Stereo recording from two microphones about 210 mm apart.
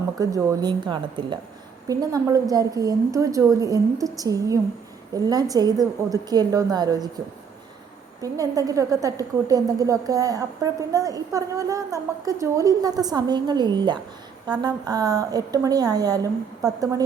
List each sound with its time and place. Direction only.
0.2 s a woman's voice: 15° right (ahead or behind)
8.2 s a woman's voice: 15° right (ahead or behind)